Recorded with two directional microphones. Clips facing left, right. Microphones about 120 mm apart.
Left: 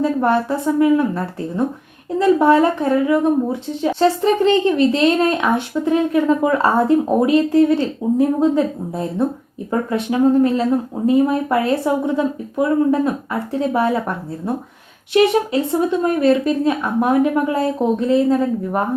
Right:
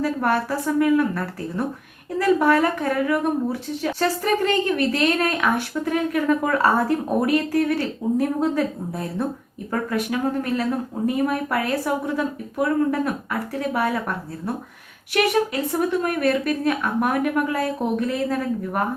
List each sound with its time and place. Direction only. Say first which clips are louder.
0.0 s speech: left 5 dB; 25° left (ahead or behind)
15.1 s speech: left 6 dB; 25° left (ahead or behind)